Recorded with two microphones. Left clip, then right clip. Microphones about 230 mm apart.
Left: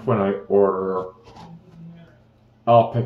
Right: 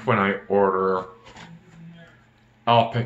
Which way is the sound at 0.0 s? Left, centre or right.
Centre.